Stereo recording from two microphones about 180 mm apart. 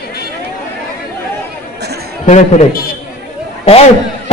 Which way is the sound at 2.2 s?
40° left (ahead or behind).